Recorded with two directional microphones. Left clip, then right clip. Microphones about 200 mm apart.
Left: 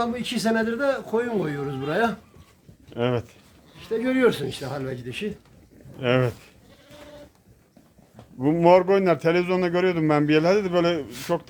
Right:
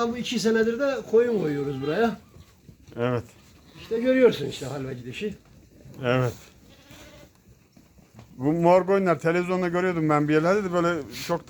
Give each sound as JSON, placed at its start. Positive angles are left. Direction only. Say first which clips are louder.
{"t": 0.0, "sound": "a man's voice", "louder": "even", "side_deg": 10}
{"t": 8.4, "sound": "a man's voice", "louder": "left 3 dB", "side_deg": 15}